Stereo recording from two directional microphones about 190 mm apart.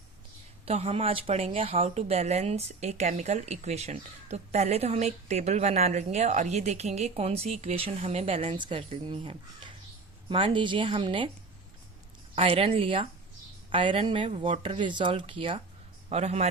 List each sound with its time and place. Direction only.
0.6 s speech: 30° right (ahead or behind)
12.4 s a man's voice: 30° right (ahead or behind)